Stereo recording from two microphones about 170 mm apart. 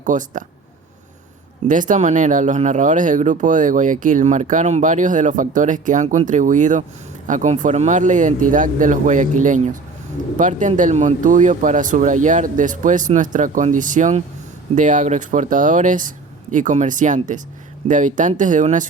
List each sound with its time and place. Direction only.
0.0 s speech: 50° right (ahead or behind)
1.6 s speech: 50° right (ahead or behind)